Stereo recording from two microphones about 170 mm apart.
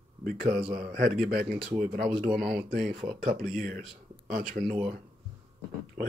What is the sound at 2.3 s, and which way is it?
Speech, centre (ahead or behind).